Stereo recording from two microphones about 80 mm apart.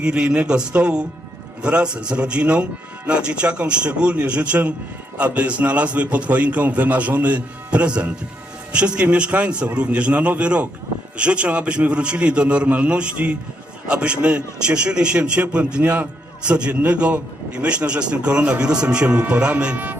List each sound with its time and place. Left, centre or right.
0.0 s a man's voice: centre